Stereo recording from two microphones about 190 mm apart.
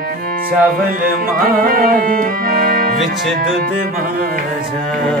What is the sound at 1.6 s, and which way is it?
Music, 50° right (ahead or behind).